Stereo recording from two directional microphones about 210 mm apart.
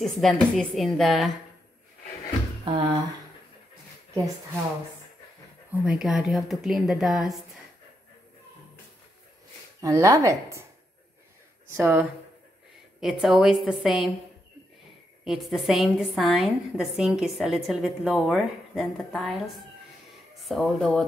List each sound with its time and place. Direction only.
0.0 s a woman's voice: centre (ahead or behind)
2.6 s a sound: 25° right (ahead or behind)
5.7 s a woman's voice: 5° right (ahead or behind)
9.8 s speech: 15° right (ahead or behind)
11.7 s a woman's voice: 10° right (ahead or behind)
15.2 s a woman's voice: centre (ahead or behind)